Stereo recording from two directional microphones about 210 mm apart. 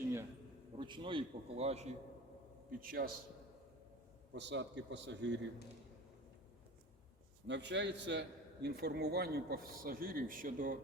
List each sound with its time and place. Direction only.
0.8 s a man's voice: 20° right (ahead or behind)
2.6 s a man's voice: 45° right (ahead or behind)
4.4 s a man's voice: 55° right (ahead or behind)
7.4 s a man's voice: 55° right (ahead or behind); by 10.8 s 40° right (ahead or behind)